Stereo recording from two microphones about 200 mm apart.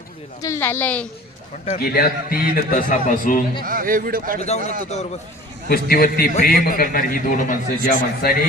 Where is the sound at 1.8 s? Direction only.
50° left (ahead or behind).